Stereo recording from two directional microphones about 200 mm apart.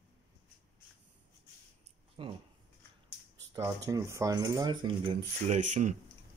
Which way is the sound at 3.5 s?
15° right (ahead or behind).